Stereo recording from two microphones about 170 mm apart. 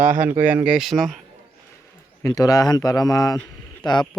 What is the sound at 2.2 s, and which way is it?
A man's voice, 20° left (ahead or behind).